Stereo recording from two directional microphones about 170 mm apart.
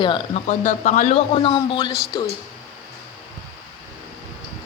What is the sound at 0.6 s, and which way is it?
Speech, 45° left (ahead or behind).